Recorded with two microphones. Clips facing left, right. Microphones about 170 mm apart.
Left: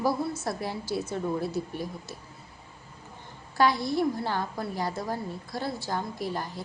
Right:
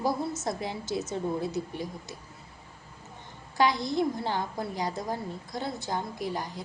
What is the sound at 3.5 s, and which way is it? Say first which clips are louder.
A woman's voice: left 1 dB; 20° right (ahead or behind).